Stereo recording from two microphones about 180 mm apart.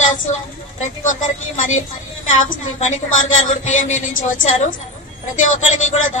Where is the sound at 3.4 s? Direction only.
45° left (ahead or behind).